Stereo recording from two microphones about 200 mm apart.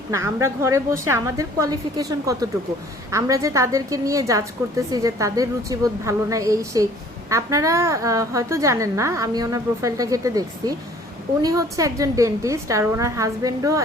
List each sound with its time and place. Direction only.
0.1 s a woman's voice: 15° right (ahead or behind)